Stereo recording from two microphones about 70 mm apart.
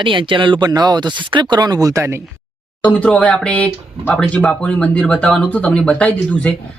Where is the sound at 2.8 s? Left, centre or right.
Centre.